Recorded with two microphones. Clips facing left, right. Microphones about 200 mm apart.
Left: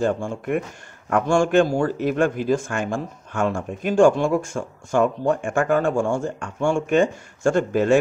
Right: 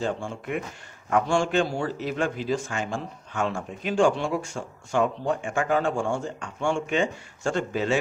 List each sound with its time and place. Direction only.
0.0 s a man's voice: 50° left (ahead or behind)